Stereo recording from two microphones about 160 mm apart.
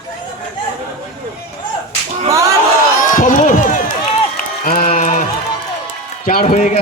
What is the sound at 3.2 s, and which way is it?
Crowd, 55° left (ahead or behind).